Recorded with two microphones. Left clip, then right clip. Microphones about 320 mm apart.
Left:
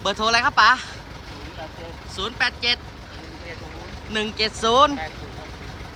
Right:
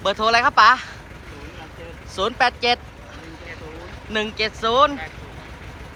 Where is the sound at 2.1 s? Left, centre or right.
Centre.